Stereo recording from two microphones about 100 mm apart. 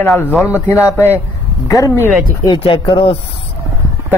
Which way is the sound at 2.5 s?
60° left (ahead or behind).